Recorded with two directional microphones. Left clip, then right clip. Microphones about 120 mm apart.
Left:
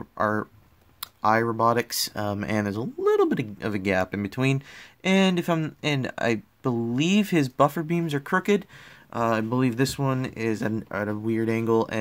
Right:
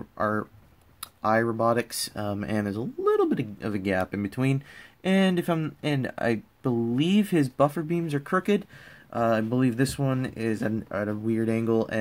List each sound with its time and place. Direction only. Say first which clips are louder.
0.2 s speech: left 2 dB; 50° left (ahead or behind)